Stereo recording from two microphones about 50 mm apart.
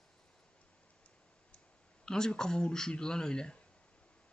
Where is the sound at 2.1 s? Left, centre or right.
Centre.